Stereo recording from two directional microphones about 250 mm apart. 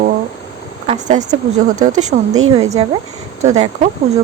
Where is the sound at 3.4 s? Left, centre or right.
Right.